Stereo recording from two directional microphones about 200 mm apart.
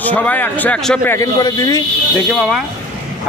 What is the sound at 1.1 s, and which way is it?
Speech, 15° left (ahead or behind).